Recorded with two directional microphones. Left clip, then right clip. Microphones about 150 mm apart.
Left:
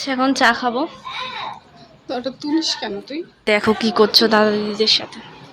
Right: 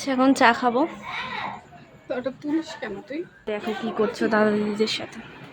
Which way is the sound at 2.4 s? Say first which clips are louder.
Left 7 dB; 70° left (ahead or behind).